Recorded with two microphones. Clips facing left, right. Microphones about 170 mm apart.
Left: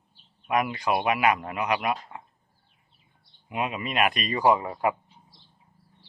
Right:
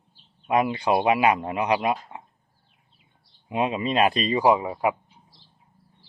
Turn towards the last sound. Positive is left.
turn(degrees=-10)  # may be behind; listen again after turning